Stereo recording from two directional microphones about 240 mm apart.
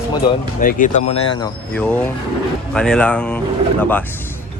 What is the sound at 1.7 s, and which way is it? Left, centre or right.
Speech, centre.